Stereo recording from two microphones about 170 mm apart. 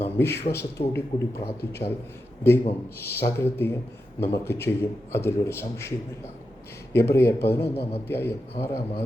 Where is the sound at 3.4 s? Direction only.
15° left (ahead or behind).